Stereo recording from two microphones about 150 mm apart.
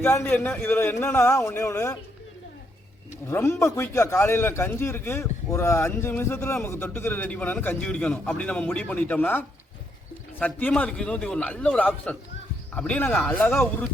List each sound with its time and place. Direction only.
0.0 s a man's voice: 15° left (ahead or behind)
3.2 s a man's voice: 15° left (ahead or behind)
10.4 s a man's voice: 10° left (ahead or behind)